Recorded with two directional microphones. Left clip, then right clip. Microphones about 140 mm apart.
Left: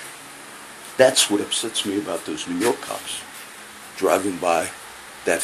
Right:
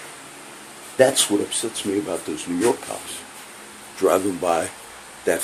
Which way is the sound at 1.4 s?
30° right (ahead or behind).